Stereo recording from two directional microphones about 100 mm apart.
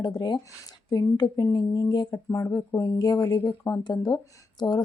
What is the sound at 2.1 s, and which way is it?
Speech, 30° left (ahead or behind).